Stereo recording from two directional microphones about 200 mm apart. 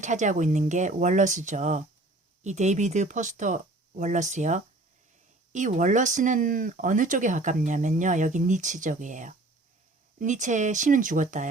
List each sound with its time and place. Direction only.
0.0 s speech: 35° right (ahead or behind)